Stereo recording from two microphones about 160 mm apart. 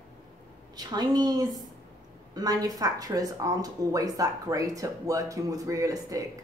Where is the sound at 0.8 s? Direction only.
25° right (ahead or behind).